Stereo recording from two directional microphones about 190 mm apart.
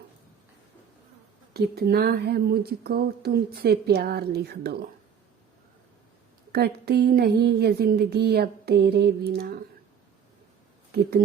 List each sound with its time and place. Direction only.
1.5 s speech: 55° right (ahead or behind)
6.5 s speech: 55° right (ahead or behind)
10.9 s speech: 55° right (ahead or behind)